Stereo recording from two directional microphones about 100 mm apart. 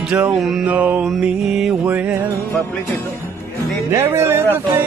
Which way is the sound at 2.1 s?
30° right (ahead or behind).